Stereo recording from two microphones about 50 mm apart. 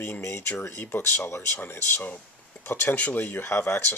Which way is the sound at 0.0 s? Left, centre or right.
Left.